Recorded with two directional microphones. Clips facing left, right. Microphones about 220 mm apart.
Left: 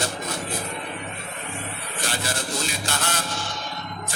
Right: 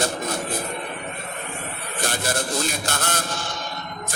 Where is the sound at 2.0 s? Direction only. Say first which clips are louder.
Right 4 dB; 50° right (ahead or behind).